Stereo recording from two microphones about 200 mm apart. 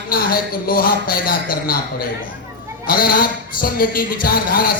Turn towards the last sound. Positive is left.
turn(degrees=45)  # may be behind; listen again after turning